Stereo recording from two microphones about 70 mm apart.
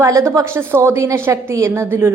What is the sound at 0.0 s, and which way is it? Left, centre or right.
A woman's voice, right.